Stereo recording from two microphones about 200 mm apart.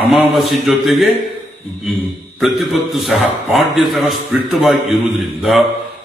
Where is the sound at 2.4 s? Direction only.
Centre (ahead or behind).